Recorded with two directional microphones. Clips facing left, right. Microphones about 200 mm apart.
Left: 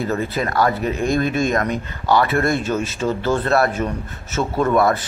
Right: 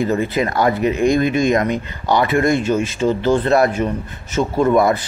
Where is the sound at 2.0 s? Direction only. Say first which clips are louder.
Right 2 dB; 15° right (ahead or behind).